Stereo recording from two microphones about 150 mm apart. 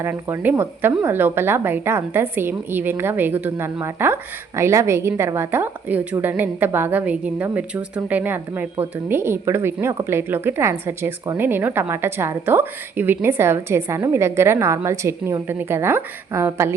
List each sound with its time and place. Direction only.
0.0 s a woman's voice: 15° right (ahead or behind)